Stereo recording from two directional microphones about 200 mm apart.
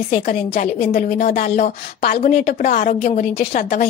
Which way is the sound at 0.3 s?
50° left (ahead or behind).